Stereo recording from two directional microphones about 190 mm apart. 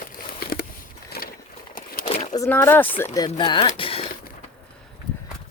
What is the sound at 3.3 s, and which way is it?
Speech, 25° left (ahead or behind).